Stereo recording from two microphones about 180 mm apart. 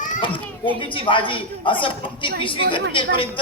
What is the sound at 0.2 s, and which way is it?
A child's voice, 30° left (ahead or behind).